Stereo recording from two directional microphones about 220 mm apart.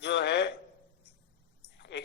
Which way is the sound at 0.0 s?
50° left (ahead or behind).